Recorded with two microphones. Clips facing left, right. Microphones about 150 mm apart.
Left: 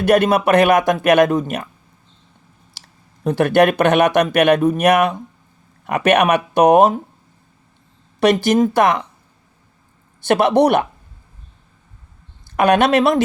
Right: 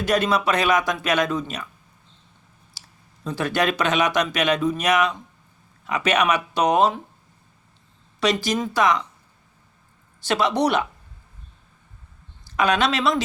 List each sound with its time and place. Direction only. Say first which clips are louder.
0.0 s speech: left 7 dB; 60° left (ahead or behind)
2.8 s clicking: left 3 dB; 65° left (ahead or behind)
3.2 s speech: left 9 dB; 60° left (ahead or behind)
8.2 s speech: left 8 dB; 55° left (ahead or behind)
10.2 s speech: left 8 dB; 55° left (ahead or behind)
12.5 s speech: left 7 dB; 55° left (ahead or behind)